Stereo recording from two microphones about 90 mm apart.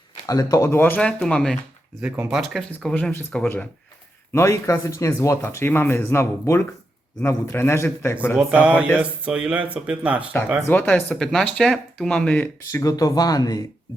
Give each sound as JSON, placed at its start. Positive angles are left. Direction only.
{"t": 0.3, "sound": "speech", "side_deg": 40}
{"t": 0.6, "sound": "speech", "side_deg": 25}
{"t": 1.0, "sound": "speech", "side_deg": 10}
{"t": 2.0, "sound": "speech", "side_deg": -15}
{"t": 2.3, "sound": "speech", "side_deg": 0}
{"t": 2.9, "sound": "speech", "side_deg": 20}
{"t": 4.3, "sound": "speech", "side_deg": 30}
{"t": 8.4, "sound": "speech", "side_deg": -15}
{"t": 10.7, "sound": "speech", "side_deg": 20}
{"t": 11.1, "sound": "speech", "side_deg": 5}
{"t": 12.7, "sound": "speech", "side_deg": 40}